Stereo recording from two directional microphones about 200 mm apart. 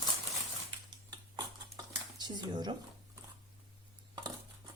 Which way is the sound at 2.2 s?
20° right (ahead or behind).